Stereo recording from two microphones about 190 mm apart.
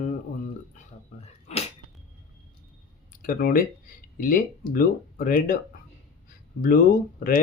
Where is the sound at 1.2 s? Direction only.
35° left (ahead or behind).